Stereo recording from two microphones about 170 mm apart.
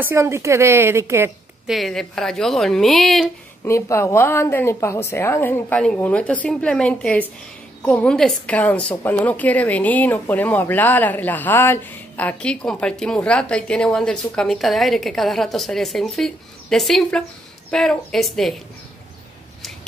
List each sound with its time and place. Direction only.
0.0 s a woman's voice: 15° right (ahead or behind)
1.7 s a woman's voice: centre (ahead or behind)
3.6 s a woman's voice: 15° left (ahead or behind)